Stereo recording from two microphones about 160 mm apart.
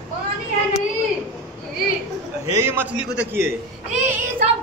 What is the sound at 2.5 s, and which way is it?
A man's voice, 15° right (ahead or behind).